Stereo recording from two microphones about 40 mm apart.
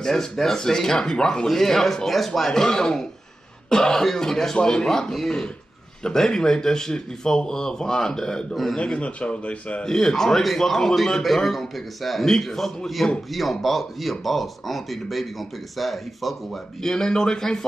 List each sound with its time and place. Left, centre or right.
0.0 s a man's voice: centre
6.0 s a man's voice: centre; by 9.8 s left
9.8 s speech: centre
16.8 s speech: centre